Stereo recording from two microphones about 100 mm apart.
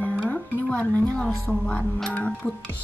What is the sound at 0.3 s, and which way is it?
Speech, 15° left (ahead or behind).